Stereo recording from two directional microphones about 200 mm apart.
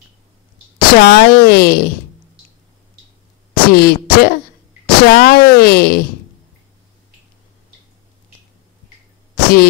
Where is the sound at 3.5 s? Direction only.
50° left (ahead or behind).